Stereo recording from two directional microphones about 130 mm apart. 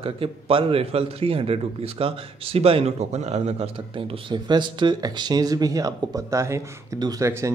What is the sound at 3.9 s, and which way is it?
Speech, 40° right (ahead or behind).